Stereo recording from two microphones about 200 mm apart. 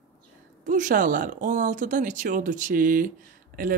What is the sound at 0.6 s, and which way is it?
Speech, 40° right (ahead or behind).